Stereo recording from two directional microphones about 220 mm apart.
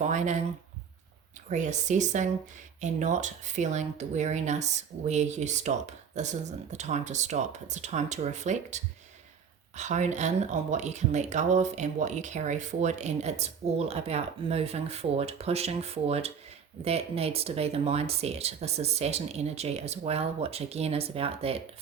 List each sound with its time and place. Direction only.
0.0 s speech: 30° right (ahead or behind)
1.5 s speech: 35° right (ahead or behind)